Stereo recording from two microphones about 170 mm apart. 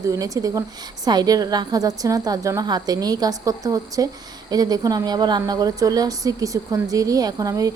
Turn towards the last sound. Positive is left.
turn(degrees=-20)  # may be behind; listen again after turning